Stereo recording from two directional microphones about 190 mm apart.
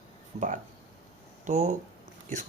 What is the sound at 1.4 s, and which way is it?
Speech, 40° right (ahead or behind).